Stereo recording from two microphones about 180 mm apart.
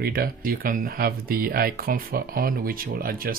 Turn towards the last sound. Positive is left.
turn(degrees=-55)  # may be behind; listen again after turning